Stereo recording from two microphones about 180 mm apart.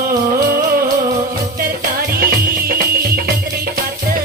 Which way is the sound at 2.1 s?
55° right (ahead or behind).